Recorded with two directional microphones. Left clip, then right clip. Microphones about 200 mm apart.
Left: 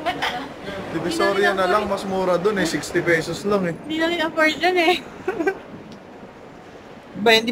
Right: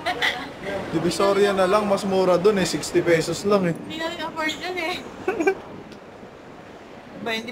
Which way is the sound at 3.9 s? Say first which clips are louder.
Left 7 dB; 40° left (ahead or behind).